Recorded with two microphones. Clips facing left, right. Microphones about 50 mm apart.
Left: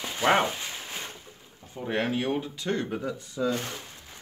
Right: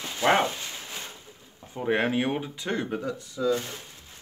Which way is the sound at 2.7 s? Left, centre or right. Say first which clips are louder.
Even; centre.